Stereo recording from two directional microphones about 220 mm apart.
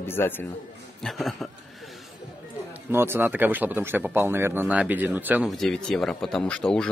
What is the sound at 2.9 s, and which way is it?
Speech, 10° right (ahead or behind).